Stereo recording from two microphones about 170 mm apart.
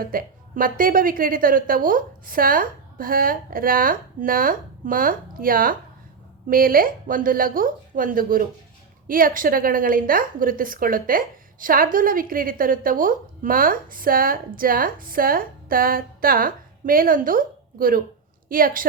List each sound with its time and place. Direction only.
0.0 s a woman's voice: 55° right (ahead or behind)